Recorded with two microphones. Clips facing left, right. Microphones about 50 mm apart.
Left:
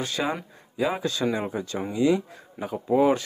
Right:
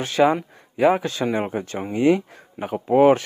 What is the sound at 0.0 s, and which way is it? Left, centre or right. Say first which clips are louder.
Speech: right 9 dB; right.